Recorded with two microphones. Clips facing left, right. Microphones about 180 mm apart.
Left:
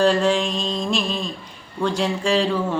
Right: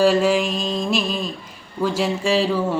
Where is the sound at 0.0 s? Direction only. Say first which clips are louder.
Right 2 dB; 5° right (ahead or behind).